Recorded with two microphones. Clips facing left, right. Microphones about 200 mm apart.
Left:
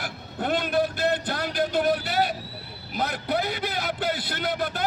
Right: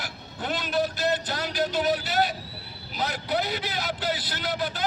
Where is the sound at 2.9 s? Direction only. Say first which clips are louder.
Left 1 dB; 55° left (ahead or behind).